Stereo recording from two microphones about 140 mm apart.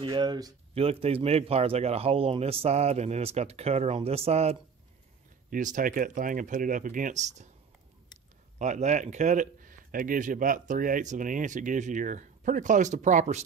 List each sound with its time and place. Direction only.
0.0 s speech: 35° right (ahead or behind)
0.7 s speech: 45° right (ahead or behind)
5.5 s speech: 70° right (ahead or behind)
8.5 s speech: 55° right (ahead or behind)